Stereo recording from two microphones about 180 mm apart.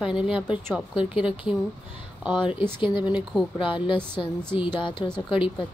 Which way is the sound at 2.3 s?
25° left (ahead or behind).